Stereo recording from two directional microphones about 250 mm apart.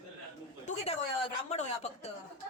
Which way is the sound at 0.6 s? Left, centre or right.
Left.